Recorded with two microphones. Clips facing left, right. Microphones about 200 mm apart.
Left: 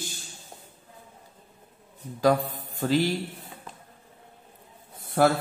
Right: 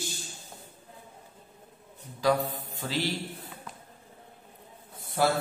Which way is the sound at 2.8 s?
50° left (ahead or behind).